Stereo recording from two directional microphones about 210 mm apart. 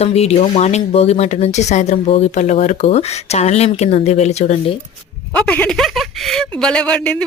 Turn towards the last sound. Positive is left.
turn(degrees=5)  # may be behind; listen again after turning